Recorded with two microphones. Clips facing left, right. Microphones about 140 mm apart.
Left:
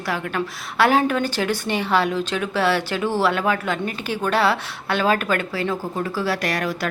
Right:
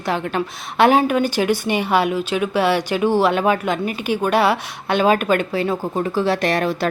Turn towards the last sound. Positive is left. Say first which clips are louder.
# right 5 dB
turn(degrees=-25)  # may be behind; listen again after turning